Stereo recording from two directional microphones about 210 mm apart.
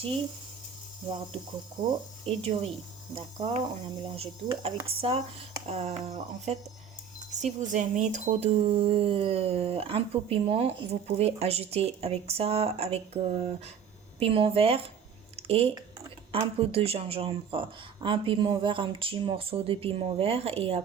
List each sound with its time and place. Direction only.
1.8 s speech: 20° right (ahead or behind)